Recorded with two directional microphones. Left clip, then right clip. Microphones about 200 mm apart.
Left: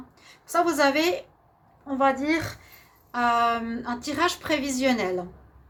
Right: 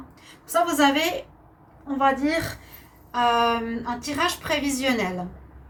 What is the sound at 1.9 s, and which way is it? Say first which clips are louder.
A woman's voice: right 1 dB; 50° left (ahead or behind).